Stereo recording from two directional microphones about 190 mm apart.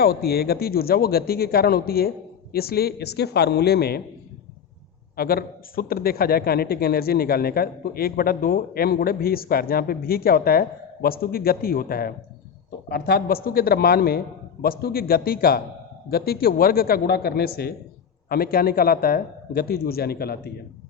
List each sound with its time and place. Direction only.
0.0 s a man's voice: 55° left (ahead or behind)
5.1 s speech: 50° left (ahead or behind)